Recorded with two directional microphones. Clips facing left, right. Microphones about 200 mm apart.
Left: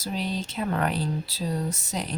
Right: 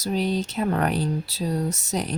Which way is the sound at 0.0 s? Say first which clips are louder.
Right 6 dB; 45° right (ahead or behind).